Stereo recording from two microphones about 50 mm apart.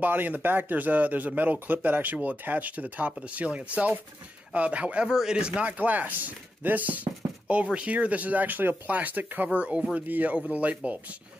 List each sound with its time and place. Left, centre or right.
0.0 s speech: right
3.1 s speech: centre
5.0 s speech: centre